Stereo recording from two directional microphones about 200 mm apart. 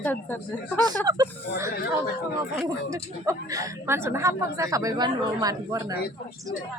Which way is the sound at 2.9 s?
15° right (ahead or behind).